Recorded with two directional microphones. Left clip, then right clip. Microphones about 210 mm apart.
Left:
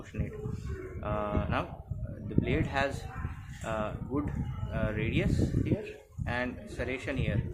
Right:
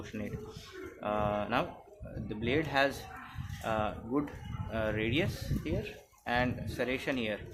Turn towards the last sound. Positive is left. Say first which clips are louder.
# right 1 dB
turn(degrees=-25)  # may be behind; listen again after turning